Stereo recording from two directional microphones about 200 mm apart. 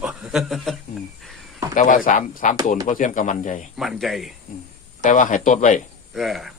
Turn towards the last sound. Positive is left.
turn(degrees=0)  # may be behind; listen again after turning